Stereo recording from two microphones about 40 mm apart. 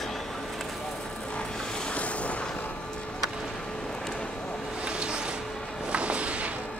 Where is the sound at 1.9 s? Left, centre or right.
Left.